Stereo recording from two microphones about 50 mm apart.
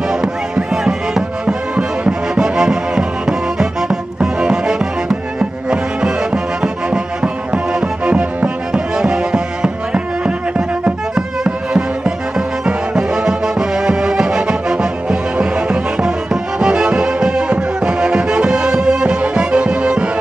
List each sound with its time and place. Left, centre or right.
0.1 s music: centre